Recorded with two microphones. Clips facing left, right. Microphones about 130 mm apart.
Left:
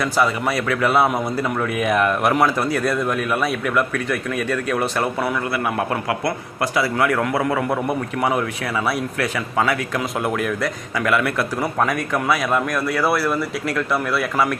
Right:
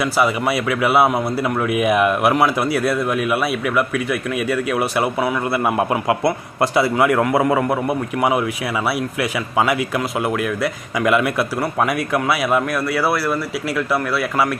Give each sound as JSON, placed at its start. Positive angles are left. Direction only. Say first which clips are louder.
{"t": 0.0, "sound": "a man's voice", "louder": "right 2 dB", "side_deg": -10}
{"t": 5.5, "sound": "a man's voice", "louder": "right 4 dB", "side_deg": -25}
{"t": 6.9, "sound": "a man's voice", "louder": "right 4 dB", "side_deg": -15}
{"t": 10.9, "sound": "speech", "louder": "right 3 dB", "side_deg": -15}